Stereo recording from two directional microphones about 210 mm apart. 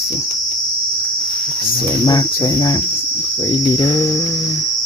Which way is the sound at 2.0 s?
20° left (ahead or behind).